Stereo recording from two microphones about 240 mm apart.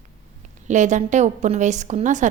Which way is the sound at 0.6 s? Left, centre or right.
Right.